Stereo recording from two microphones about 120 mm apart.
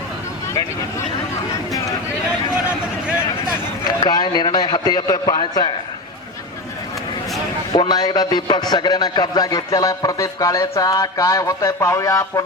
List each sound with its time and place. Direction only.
3.8 s a man's voice: 35° left (ahead or behind)
7.7 s a man's voice: 35° left (ahead or behind)